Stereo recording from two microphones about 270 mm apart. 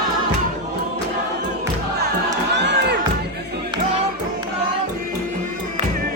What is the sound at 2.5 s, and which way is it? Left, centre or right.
Crowd, right.